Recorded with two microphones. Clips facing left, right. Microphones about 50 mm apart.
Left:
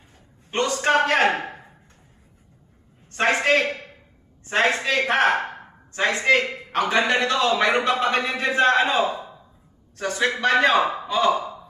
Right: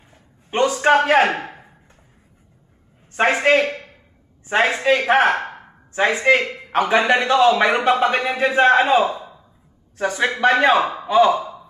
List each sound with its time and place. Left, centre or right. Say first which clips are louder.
0.5 s a sound: right 5 dB; centre
1.3 s chopping: even; centre
3.1 s a man's voice: right 4 dB; centre